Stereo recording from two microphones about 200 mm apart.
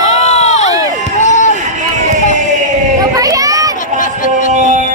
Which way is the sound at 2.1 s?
40° right (ahead or behind).